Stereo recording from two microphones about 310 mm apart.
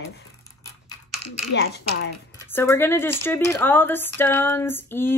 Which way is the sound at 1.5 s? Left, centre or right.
Left.